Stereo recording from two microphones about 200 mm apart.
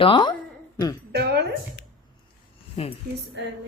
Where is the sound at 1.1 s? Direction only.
55° right (ahead or behind).